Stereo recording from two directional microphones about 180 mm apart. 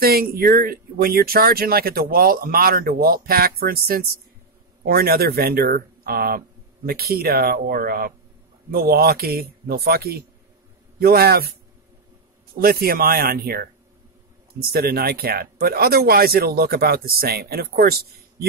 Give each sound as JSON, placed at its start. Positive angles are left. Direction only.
{"t": 0.0, "sound": "speech", "side_deg": -55}
{"t": 12.5, "sound": "speech", "side_deg": -55}